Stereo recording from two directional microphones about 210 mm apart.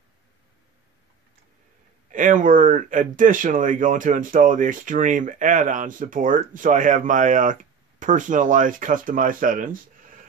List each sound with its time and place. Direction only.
2.0 s speech: 40° right (ahead or behind)